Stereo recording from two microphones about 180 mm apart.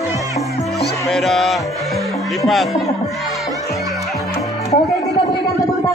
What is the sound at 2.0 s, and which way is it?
Speech, centre (ahead or behind).